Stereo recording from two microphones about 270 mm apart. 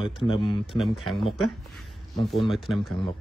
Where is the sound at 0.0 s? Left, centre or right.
Centre.